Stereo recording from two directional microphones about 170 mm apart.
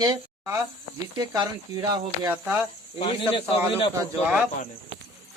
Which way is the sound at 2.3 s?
5° right (ahead or behind).